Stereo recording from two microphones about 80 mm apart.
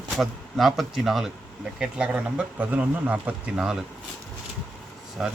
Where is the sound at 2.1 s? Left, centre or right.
Centre.